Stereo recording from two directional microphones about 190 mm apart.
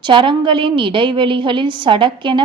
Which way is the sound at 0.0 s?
25° right (ahead or behind).